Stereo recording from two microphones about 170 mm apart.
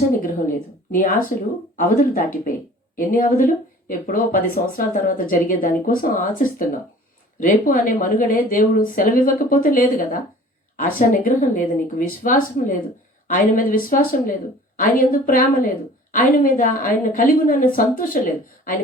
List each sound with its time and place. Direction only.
0.2 s a woman's voice: 50° left (ahead or behind)